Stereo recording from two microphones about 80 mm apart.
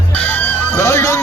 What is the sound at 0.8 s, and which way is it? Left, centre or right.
Music, left.